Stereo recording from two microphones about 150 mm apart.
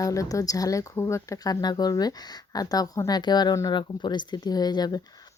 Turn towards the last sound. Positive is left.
turn(degrees=25)  # may be behind; listen again after turning